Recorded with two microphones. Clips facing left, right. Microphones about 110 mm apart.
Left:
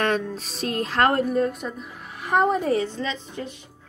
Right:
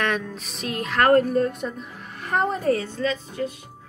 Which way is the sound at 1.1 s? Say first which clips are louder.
Right 3 dB; 45° right (ahead or behind).